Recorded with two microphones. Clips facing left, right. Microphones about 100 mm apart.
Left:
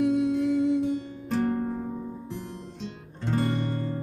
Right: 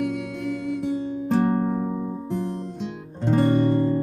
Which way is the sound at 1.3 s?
45° right (ahead or behind).